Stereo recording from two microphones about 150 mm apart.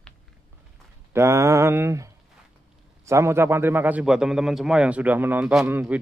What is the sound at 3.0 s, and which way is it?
A man's voice, 20° right (ahead or behind).